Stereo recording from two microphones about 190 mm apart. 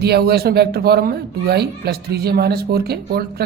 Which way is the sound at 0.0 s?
55° right (ahead or behind).